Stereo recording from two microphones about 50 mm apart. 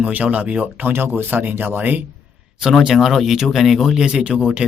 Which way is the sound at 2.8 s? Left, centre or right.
Centre.